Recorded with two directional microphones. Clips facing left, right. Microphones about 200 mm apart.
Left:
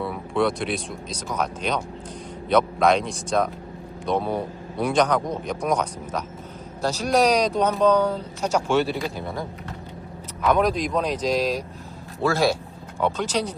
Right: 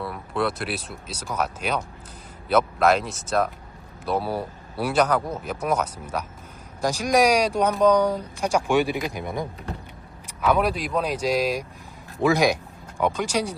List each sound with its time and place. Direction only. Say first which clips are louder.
0.0 s a man's voice: left 3 dB; centre (ahead or behind); by 9.5 s 15° right (ahead or behind)
10.4 s speech: left 1 dB; 5° right (ahead or behind)